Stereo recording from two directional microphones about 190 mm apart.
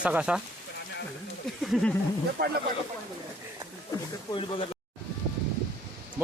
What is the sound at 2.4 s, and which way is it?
Speech, 55° right (ahead or behind).